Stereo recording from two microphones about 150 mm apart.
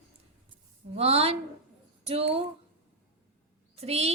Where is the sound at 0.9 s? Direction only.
40° right (ahead or behind).